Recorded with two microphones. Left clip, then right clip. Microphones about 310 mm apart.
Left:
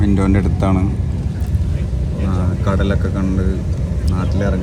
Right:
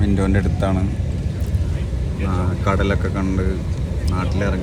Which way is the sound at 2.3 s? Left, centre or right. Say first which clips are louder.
Right 1 dB; centre.